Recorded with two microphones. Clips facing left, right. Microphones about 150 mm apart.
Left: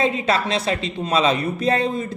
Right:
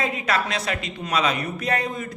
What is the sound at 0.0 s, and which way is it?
Speech, 25° left (ahead or behind).